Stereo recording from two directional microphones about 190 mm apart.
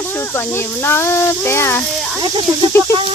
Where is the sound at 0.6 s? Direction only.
15° left (ahead or behind).